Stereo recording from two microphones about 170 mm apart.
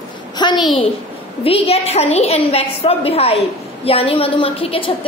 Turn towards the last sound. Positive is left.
turn(degrees=35)  # may be behind; listen again after turning